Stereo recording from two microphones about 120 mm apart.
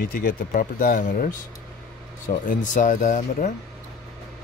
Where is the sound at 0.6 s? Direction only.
90° left.